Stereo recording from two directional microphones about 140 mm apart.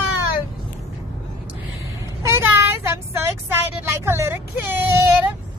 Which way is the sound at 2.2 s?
20° right (ahead or behind).